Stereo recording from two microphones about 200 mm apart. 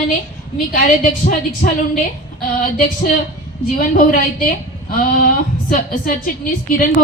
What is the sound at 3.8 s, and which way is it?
Speech, 45° left (ahead or behind).